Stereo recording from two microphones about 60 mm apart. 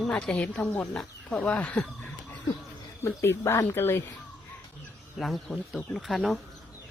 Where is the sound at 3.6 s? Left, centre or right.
Left.